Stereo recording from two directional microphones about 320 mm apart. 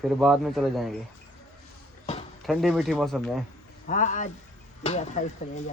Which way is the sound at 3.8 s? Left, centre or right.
Left.